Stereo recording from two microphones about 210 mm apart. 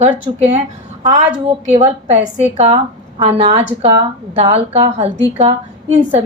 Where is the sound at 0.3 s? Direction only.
30° right (ahead or behind).